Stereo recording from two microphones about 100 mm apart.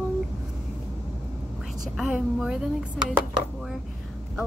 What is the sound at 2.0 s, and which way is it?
A woman's voice, 5° right (ahead or behind).